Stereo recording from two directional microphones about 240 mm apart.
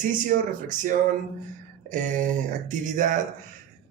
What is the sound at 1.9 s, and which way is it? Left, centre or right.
A man's voice, right.